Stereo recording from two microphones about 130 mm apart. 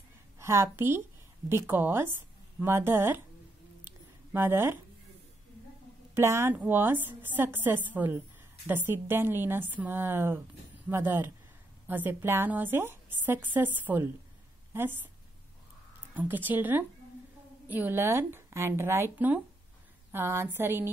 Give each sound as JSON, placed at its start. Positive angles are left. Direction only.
{"t": 0.4, "sound": "a woman's voice", "side_deg": -20}
{"t": 3.8, "sound": "a sound", "side_deg": -15}
{"t": 6.1, "sound": "a woman's voice", "side_deg": -20}
{"t": 16.2, "sound": "a woman's voice", "side_deg": -15}